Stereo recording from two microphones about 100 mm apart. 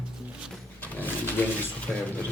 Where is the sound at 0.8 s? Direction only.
20° left (ahead or behind).